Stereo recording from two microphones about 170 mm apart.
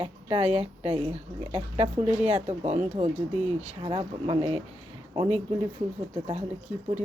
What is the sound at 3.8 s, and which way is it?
Speech, 30° right (ahead or behind).